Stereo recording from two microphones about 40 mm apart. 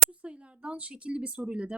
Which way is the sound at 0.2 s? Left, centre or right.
Right.